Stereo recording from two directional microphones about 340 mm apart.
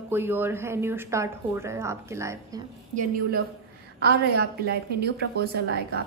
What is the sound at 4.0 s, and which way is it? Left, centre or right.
A woman's voice, right.